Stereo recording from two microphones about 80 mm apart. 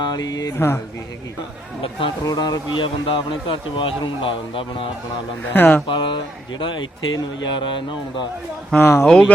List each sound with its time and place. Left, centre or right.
0.0 s speech: left
0.5 s speech: left
1.8 s a man's voice: left
2.2 s speech: left
2.7 s a man's voice: left
5.5 s speech: left
5.9 s speech: left
8.8 s speech: left
9.0 s speech: centre